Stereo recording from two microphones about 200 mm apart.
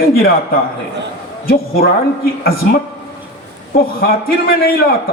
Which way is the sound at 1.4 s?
50° left (ahead or behind).